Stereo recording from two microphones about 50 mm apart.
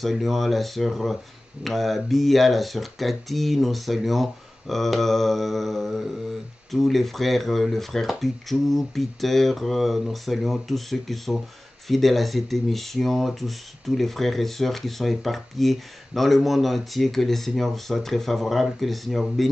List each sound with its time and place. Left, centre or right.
0.0 s speech: centre